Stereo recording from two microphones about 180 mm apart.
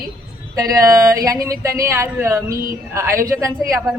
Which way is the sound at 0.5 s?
20° right (ahead or behind).